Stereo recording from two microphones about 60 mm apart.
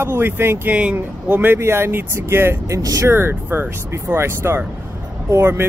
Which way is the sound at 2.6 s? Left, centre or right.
Right.